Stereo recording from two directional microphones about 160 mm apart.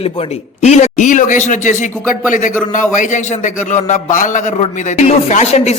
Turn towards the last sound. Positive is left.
turn(degrees=45)  # may be behind; listen again after turning